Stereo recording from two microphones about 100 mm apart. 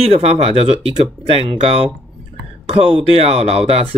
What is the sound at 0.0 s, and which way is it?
Speech, 90° right.